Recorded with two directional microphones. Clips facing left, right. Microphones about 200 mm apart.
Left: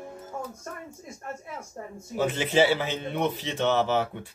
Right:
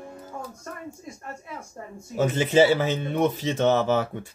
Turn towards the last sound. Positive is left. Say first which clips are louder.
# right 3 dB
turn(degrees=-45)  # may be behind; listen again after turning